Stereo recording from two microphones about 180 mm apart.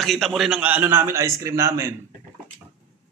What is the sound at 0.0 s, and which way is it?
A man's voice, centre (ahead or behind).